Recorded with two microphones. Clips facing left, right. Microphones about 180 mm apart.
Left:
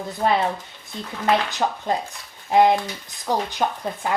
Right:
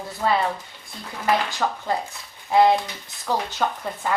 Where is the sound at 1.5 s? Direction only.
20° left (ahead or behind).